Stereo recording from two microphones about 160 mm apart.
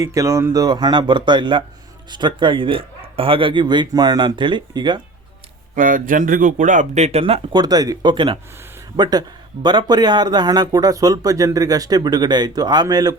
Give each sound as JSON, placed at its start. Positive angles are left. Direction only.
{"t": 0.0, "sound": "speech", "side_deg": -20}
{"t": 5.7, "sound": "speech", "side_deg": -55}
{"t": 7.6, "sound": "speech", "side_deg": -25}